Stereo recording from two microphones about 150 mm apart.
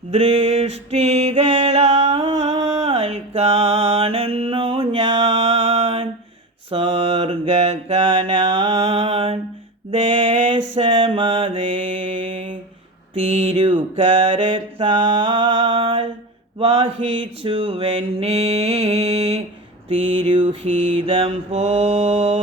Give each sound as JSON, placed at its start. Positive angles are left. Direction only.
{"t": 0.1, "sound": "mantra", "side_deg": -40}